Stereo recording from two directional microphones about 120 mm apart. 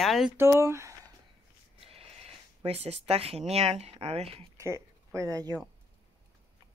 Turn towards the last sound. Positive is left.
turn(degrees=-30)  # may be behind; listen again after turning